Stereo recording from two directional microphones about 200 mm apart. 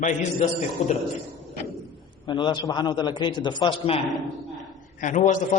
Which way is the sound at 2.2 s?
25° left (ahead or behind).